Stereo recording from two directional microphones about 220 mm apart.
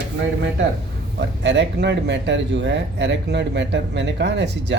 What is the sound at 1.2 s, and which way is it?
Speech, 55° right (ahead or behind).